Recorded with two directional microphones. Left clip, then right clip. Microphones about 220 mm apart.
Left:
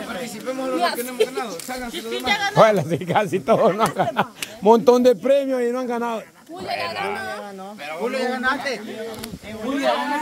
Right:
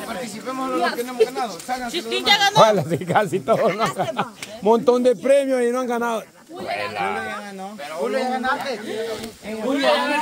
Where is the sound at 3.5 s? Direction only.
20° left (ahead or behind).